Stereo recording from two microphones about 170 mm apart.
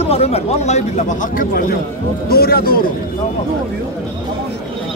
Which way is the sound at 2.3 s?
65° left (ahead or behind).